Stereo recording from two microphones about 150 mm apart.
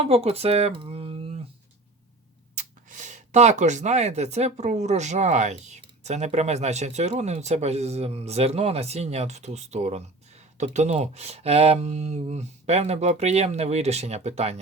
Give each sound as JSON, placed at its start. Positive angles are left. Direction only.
{"t": 0.0, "sound": "speech", "side_deg": -40}
{"t": 2.6, "sound": "speech", "side_deg": -55}